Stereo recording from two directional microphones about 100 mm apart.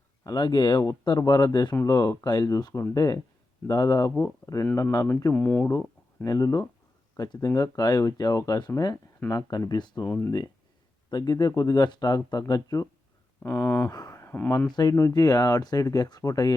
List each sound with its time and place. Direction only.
0.3 s speech: 45° left (ahead or behind)
5.3 s speech: 15° left (ahead or behind)
6.2 s speech: 35° left (ahead or behind)
10.1 s speech: 20° left (ahead or behind)
11.1 s speech: 45° left (ahead or behind)
13.4 s speech: 25° left (ahead or behind)
13.9 s speech: 40° left (ahead or behind)
14.2 s a sound: 20° left (ahead or behind)
14.7 s speech: 40° left (ahead or behind)